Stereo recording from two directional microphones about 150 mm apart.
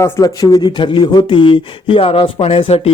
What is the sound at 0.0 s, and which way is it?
Speech, 20° left (ahead or behind).